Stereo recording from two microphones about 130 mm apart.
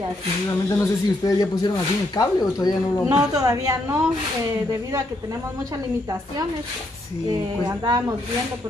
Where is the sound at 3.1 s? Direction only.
25° right (ahead or behind).